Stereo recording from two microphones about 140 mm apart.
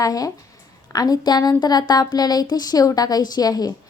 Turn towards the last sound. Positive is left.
turn(degrees=25)  # may be behind; listen again after turning